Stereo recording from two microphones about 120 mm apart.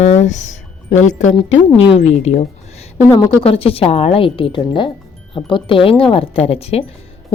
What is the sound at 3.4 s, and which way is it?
A woman's voice, 55° left (ahead or behind).